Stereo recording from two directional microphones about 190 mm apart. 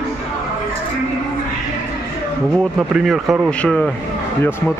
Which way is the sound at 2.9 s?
Centre (ahead or behind).